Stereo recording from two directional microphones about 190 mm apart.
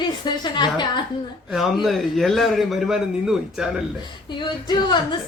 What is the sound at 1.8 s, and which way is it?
A man's voice, centre (ahead or behind).